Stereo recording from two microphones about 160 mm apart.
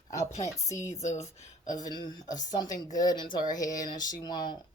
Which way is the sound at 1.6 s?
25° left (ahead or behind).